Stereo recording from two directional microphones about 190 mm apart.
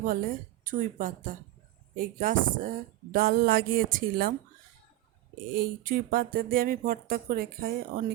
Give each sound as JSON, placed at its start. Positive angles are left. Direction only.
{"t": 0.6, "sound": "speech", "side_deg": -45}
{"t": 5.5, "sound": "speech", "side_deg": -50}